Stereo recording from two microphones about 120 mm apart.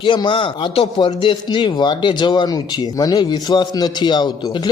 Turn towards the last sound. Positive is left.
turn(degrees=40)  # may be behind; listen again after turning